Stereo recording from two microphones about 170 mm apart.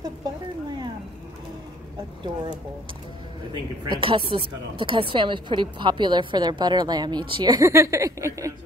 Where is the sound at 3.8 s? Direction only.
30° right (ahead or behind).